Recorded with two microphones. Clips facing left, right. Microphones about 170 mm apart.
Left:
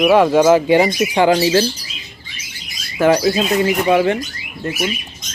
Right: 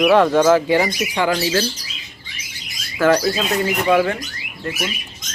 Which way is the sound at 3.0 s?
20° left (ahead or behind).